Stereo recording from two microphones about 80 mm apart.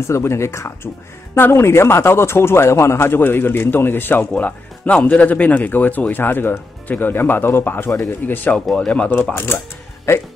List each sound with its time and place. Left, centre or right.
0.0 s a man's voice: left
8.5 s speech: centre
9.1 s a man's voice: left